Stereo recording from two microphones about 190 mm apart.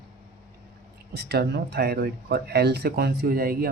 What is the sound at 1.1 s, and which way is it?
Speech, 60° right (ahead or behind).